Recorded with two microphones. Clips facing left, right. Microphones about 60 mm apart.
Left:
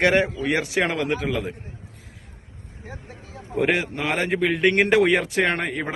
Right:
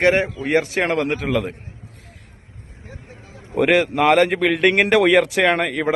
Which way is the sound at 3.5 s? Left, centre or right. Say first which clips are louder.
Right 6 dB; right.